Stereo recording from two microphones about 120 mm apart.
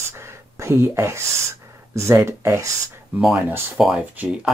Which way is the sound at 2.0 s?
25° right (ahead or behind).